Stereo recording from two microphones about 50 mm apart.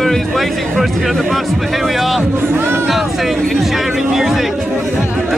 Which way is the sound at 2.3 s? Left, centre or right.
Right.